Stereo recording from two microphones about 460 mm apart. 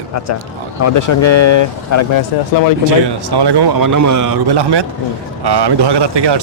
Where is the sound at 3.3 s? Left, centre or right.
Right.